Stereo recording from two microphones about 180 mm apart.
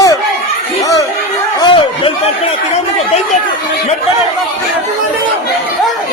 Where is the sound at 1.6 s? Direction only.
25° left (ahead or behind).